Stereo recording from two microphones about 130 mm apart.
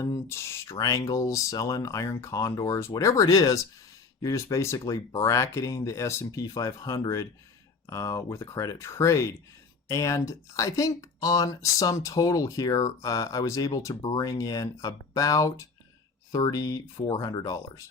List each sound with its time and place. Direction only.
0.0 s speech: 25° left (ahead or behind)